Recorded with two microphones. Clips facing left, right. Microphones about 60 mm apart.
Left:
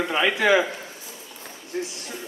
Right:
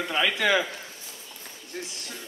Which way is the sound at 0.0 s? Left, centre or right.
Left.